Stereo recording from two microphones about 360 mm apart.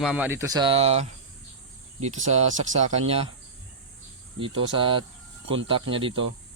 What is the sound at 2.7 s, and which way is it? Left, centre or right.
Speech, centre.